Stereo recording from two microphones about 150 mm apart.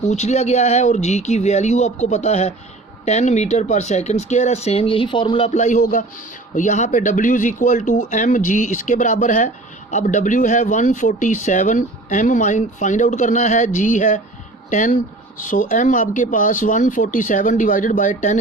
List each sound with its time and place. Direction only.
0.1 s speech: 50° left (ahead or behind)